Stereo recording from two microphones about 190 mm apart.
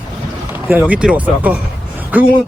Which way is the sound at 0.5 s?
10° right (ahead or behind).